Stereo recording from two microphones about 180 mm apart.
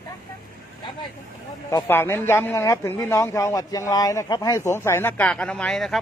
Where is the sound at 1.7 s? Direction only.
15° left (ahead or behind).